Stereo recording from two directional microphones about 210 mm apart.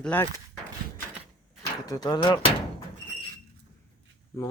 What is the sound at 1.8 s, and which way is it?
Speech, 20° left (ahead or behind).